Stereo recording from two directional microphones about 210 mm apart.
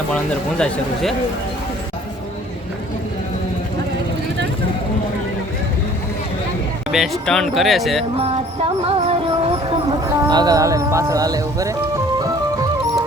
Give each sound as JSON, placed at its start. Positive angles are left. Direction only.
{"t": 6.9, "sound": "speech", "side_deg": 0}
{"t": 8.1, "sound": "music", "side_deg": -30}
{"t": 10.2, "sound": "speech", "side_deg": -20}